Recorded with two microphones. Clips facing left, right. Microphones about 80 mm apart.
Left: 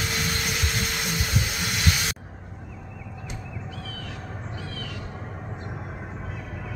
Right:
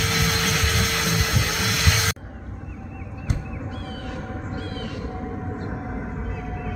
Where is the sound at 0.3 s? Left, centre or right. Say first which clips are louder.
Right 5 dB; right.